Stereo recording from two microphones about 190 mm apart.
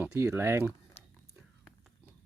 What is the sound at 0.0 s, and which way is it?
Speech, 15° right (ahead or behind).